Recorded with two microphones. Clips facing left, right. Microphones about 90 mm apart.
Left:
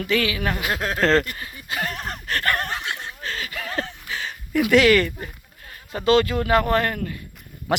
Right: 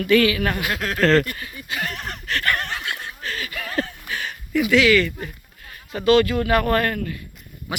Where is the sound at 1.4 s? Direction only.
30° left (ahead or behind).